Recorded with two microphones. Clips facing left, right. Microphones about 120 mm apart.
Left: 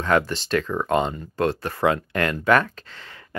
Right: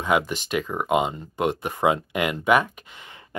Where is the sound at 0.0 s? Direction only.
10° right (ahead or behind).